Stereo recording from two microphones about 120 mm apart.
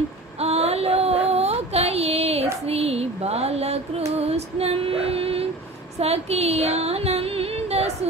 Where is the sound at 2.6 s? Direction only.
60° right (ahead or behind).